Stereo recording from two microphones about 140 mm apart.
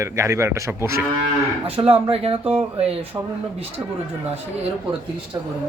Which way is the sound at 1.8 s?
40° right (ahead or behind).